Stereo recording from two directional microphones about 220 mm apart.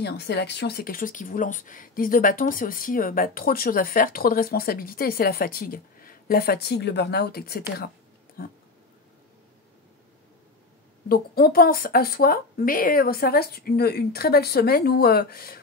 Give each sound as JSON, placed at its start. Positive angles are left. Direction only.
{"t": 0.0, "sound": "speech", "side_deg": 50}
{"t": 11.1, "sound": "speech", "side_deg": 40}